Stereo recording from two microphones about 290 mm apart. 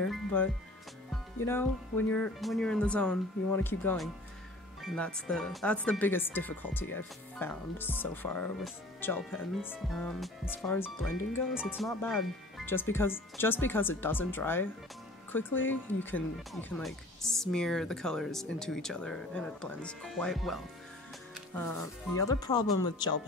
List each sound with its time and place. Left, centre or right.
0.1 s speech: centre